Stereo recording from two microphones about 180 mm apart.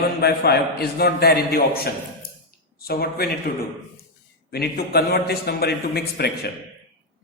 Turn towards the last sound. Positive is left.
turn(degrees=65)  # may be behind; listen again after turning